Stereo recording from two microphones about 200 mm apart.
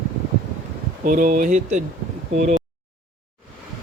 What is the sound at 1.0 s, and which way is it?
Speech, 40° right (ahead or behind).